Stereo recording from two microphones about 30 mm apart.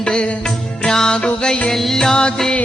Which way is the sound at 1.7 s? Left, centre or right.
Centre.